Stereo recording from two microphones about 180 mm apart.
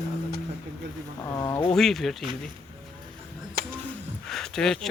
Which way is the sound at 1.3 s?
15° left (ahead or behind).